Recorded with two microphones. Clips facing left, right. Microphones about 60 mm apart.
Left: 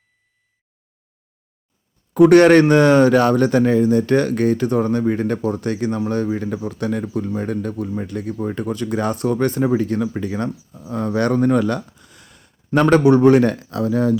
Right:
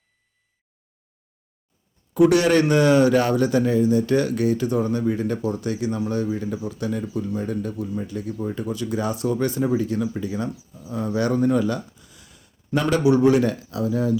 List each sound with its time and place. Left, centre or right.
2.1 s a man's voice: left